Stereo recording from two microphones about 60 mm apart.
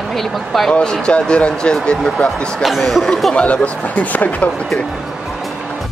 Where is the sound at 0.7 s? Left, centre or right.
Centre.